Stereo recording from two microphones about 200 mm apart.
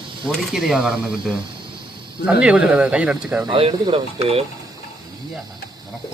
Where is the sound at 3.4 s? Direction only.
25° right (ahead or behind).